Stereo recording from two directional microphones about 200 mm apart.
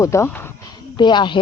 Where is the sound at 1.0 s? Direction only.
20° left (ahead or behind).